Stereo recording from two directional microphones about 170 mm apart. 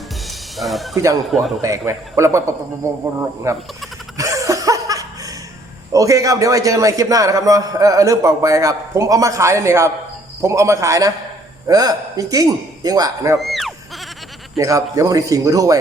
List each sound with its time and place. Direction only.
0.3 s music: centre (ahead or behind)
0.9 s a man's voice: 20° right (ahead or behind)
1.3 s a man's voice: centre (ahead or behind)
1.6 s a man's voice: 15° right (ahead or behind)
4.2 s laughter: 20° right (ahead or behind)
5.9 s a man's voice: 20° right (ahead or behind)
13.4 s goat: centre (ahead or behind)
14.6 s a man's voice: 20° right (ahead or behind)